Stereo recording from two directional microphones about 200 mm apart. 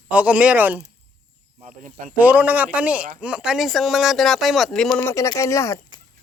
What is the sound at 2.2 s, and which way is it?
Speech, 10° right (ahead or behind).